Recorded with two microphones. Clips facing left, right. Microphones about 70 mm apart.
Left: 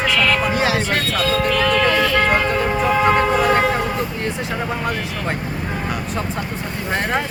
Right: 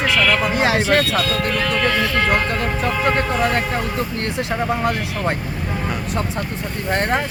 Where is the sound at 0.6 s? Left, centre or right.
Right.